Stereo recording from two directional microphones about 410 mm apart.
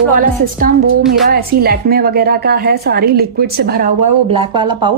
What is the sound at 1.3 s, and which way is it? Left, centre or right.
A woman's voice, right.